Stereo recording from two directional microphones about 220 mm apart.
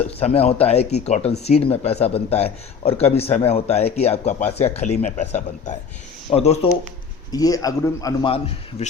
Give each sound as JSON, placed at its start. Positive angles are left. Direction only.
{"t": 0.0, "sound": "speech", "side_deg": 30}
{"t": 7.3, "sound": "a man's voice", "side_deg": 15}
{"t": 8.8, "sound": "speech", "side_deg": 30}